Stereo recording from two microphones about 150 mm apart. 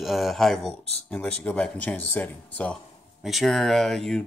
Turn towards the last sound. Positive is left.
turn(degrees=0)  # may be behind; listen again after turning